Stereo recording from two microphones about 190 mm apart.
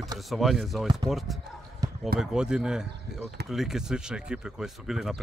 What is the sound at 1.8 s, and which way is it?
Run, 20° right (ahead or behind).